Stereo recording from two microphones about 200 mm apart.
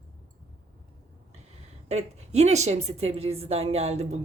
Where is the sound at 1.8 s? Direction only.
35° right (ahead or behind).